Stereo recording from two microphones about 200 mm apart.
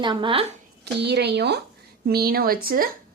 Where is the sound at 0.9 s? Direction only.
55° right (ahead or behind).